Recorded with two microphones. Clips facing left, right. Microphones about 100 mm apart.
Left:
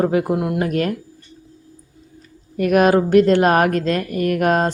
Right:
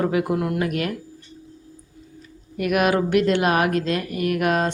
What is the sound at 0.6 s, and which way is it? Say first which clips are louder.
Speech: left 4 dB; 35° left (ahead or behind).